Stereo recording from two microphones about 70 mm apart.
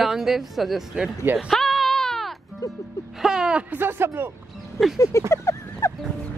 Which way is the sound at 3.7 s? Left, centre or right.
Right.